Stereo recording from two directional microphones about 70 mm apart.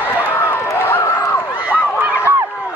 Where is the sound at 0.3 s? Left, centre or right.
Left.